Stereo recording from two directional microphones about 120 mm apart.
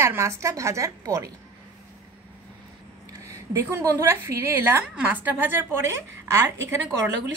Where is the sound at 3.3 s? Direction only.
25° right (ahead or behind).